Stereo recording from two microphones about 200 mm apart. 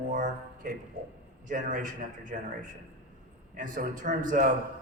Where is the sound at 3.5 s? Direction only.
40° right (ahead or behind).